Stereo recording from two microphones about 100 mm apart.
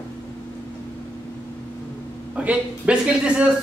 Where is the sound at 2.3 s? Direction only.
10° right (ahead or behind).